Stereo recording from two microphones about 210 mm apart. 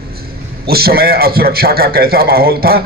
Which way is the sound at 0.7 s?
45° right (ahead or behind).